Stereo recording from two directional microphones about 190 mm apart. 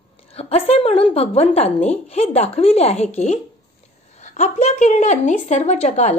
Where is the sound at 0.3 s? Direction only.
30° left (ahead or behind).